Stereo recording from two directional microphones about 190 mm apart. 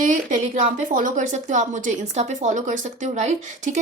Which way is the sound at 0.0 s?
40° right (ahead or behind).